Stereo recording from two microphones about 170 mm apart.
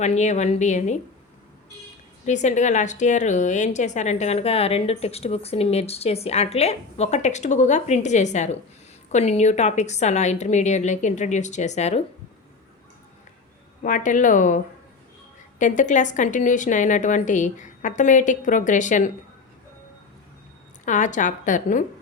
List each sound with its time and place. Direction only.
0.0 s a woman's voice: 45° left (ahead or behind)
2.2 s a woman's voice: 45° left (ahead or behind)
13.8 s a woman's voice: 50° left (ahead or behind)
20.8 s a woman's voice: 45° left (ahead or behind)